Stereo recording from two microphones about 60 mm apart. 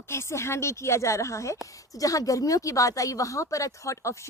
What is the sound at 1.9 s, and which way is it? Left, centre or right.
A woman's voice, left.